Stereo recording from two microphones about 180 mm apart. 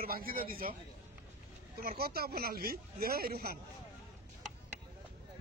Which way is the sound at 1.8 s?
55° right (ahead or behind).